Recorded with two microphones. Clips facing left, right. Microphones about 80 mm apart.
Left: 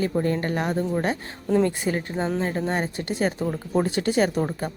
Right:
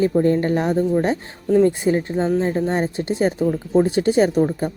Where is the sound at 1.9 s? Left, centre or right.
Centre.